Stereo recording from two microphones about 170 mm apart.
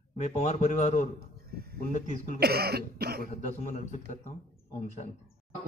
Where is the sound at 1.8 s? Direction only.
50° left (ahead or behind).